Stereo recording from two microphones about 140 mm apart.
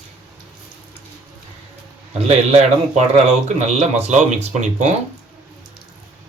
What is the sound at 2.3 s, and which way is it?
Speech, 50° right (ahead or behind).